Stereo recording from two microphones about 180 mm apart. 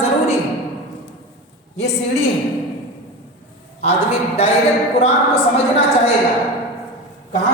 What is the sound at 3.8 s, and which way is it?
Speech, 35° left (ahead or behind).